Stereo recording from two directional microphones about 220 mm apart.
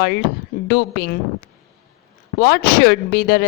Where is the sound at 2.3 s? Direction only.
45° left (ahead or behind).